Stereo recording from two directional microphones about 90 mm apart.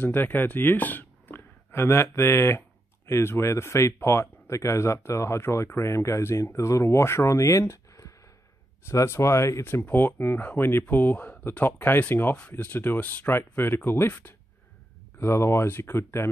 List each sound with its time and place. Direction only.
0.0 s speech: 20° left (ahead or behind)